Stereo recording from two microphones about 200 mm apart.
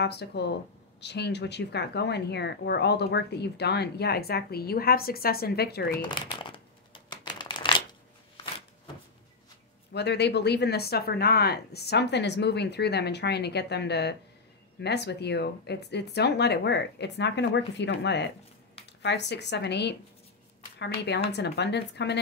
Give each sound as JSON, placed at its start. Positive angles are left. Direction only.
{"t": 0.0, "sound": "speech", "side_deg": 55}
{"t": 6.3, "sound": "a sound", "side_deg": 25}
{"t": 9.9, "sound": "speech", "side_deg": 55}